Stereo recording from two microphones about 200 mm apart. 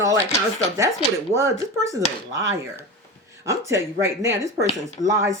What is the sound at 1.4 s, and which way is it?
Speech, 15° right (ahead or behind).